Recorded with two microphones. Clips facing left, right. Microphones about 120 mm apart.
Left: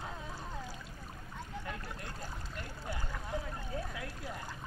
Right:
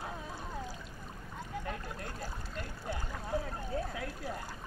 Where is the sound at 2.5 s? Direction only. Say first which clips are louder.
Right 3 dB; 25° right (ahead or behind).